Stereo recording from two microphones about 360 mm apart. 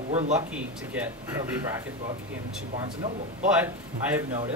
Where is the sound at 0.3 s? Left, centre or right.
Centre.